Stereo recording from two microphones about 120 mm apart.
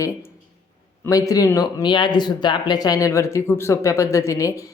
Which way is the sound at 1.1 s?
30° left (ahead or behind).